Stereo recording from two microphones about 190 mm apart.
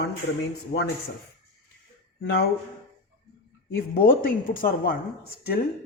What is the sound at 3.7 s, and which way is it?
Speech, 50° left (ahead or behind).